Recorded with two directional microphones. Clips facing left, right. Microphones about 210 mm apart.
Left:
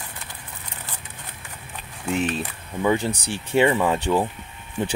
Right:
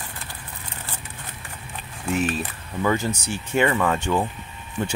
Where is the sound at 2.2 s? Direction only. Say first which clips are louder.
Even; 25° left (ahead or behind).